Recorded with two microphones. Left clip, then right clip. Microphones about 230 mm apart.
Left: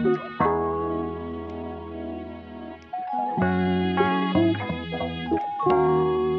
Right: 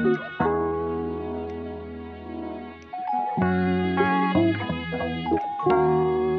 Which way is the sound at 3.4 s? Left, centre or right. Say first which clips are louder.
Even; centre.